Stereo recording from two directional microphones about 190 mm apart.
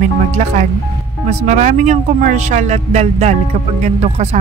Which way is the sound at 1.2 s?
40° right (ahead or behind).